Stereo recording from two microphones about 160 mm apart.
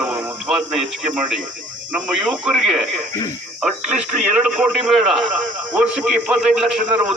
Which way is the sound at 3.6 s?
5° right (ahead or behind).